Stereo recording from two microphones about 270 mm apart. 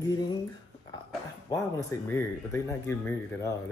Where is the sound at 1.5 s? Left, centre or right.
Centre.